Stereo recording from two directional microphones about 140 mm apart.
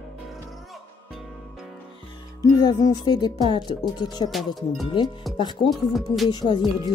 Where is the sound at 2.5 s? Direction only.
25° left (ahead or behind).